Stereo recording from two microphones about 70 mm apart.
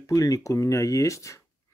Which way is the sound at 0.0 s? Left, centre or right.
Left.